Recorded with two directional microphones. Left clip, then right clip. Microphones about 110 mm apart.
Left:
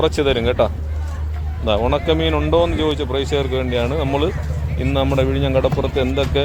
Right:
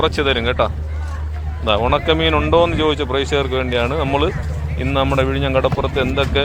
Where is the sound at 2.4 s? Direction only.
15° left (ahead or behind).